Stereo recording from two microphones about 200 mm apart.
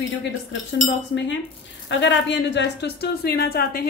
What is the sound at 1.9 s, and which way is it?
A woman's voice, 65° left (ahead or behind).